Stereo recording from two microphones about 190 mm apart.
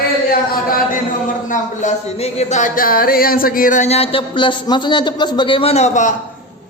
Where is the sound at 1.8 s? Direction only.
35° left (ahead or behind).